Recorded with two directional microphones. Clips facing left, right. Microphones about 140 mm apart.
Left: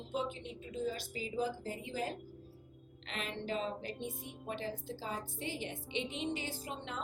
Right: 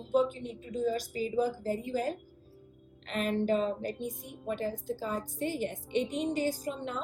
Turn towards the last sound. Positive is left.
turn(degrees=-45)  # may be behind; listen again after turning